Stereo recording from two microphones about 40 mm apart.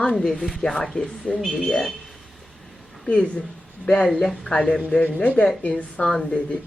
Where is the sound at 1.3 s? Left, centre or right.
Left.